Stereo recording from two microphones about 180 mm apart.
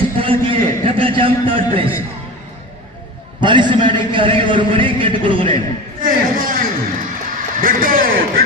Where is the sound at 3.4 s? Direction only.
25° right (ahead or behind).